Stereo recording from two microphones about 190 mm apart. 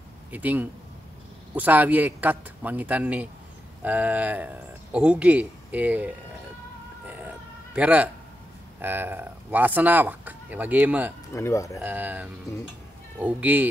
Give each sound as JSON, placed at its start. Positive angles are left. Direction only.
{"t": 0.3, "sound": "speech", "side_deg": -10}
{"t": 7.7, "sound": "speech", "side_deg": -5}
{"t": 11.3, "sound": "speech", "side_deg": 15}
{"t": 11.8, "sound": "speech", "side_deg": -10}